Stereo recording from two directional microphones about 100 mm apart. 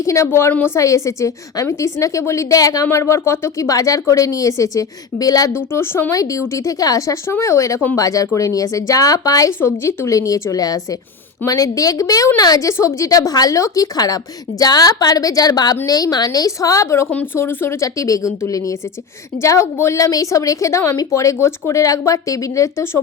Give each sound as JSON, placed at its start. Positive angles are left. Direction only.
{"t": 0.0, "sound": "a woman's voice", "side_deg": 30}
{"t": 5.5, "sound": "a woman's voice", "side_deg": 25}
{"t": 9.5, "sound": "a woman's voice", "side_deg": 25}
{"t": 17.1, "sound": "a woman's voice", "side_deg": 20}